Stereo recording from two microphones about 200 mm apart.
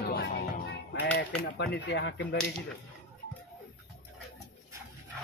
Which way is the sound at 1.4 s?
60° left (ahead or behind).